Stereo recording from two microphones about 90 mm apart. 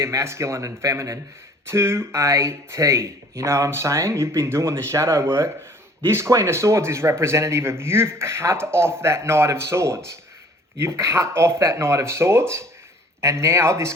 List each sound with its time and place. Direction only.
0.0 s a man's voice: 30° right (ahead or behind)